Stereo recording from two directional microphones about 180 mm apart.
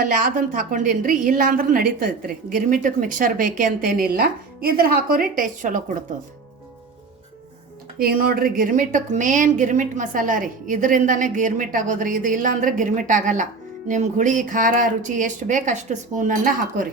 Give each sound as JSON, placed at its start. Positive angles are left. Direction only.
{"t": 0.0, "sound": "a woman's voice", "side_deg": -45}
{"t": 7.9, "sound": "a woman's voice", "side_deg": -55}